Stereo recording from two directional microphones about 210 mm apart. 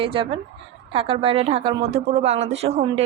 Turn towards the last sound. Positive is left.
turn(degrees=-30)  # may be behind; listen again after turning